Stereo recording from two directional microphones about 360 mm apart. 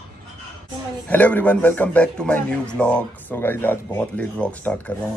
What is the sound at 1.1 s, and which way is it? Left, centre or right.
A man's voice, centre.